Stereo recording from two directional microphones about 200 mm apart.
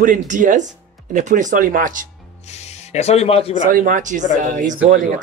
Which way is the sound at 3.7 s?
40° right (ahead or behind).